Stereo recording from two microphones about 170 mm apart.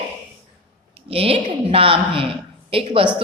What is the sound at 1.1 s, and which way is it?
A woman's voice, 35° right (ahead or behind).